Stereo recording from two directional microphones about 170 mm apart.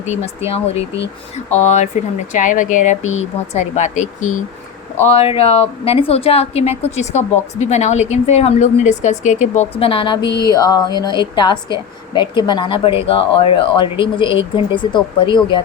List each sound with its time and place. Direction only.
0.0 s speech: 40° left (ahead or behind)
1.5 s a woman's voice: 40° left (ahead or behind)
5.0 s a woman's voice: 35° left (ahead or behind)